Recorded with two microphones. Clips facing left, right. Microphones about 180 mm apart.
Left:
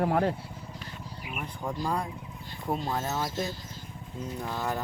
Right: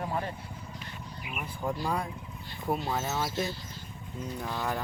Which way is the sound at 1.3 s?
5° right (ahead or behind).